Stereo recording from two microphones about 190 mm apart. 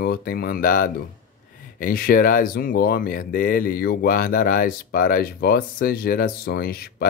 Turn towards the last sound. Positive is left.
turn(degrees=55)  # may be behind; listen again after turning